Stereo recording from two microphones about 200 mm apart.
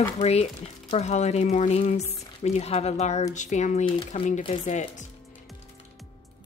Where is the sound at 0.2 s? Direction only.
30° left (ahead or behind).